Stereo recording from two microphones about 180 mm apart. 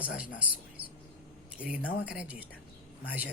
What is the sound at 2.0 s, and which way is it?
Speech, 5° right (ahead or behind).